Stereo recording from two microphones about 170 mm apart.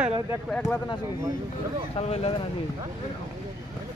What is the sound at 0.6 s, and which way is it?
Speech, 20° left (ahead or behind).